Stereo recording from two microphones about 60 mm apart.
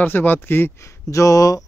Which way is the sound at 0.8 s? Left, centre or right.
Left.